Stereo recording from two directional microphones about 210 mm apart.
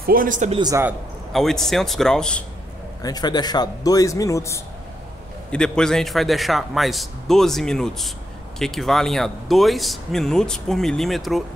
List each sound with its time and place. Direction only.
0.0 s speech: 40° right (ahead or behind)
0.6 s speech: 15° right (ahead or behind)
1.3 s speech: centre (ahead or behind)
3.0 s a man's voice: 20° left (ahead or behind)
5.5 s speech: 5° left (ahead or behind)